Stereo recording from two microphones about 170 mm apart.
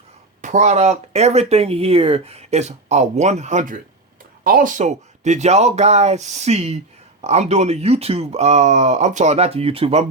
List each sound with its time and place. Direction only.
0.4 s speech: 45° right (ahead or behind)